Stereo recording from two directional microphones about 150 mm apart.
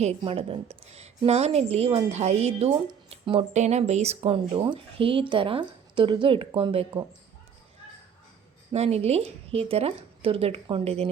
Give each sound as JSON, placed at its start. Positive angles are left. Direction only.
{"t": 0.0, "sound": "a woman's voice", "side_deg": -40}
{"t": 8.7, "sound": "a woman's voice", "side_deg": -45}